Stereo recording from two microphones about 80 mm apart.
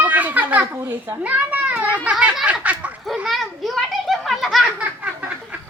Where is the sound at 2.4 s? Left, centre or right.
Centre.